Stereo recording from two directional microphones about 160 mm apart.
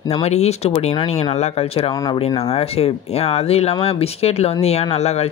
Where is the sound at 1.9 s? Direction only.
25° left (ahead or behind).